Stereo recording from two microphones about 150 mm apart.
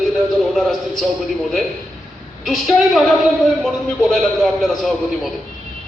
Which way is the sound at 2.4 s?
Centre (ahead or behind).